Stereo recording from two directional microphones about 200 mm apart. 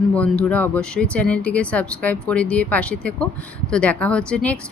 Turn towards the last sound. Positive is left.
turn(degrees=5)  # may be behind; listen again after turning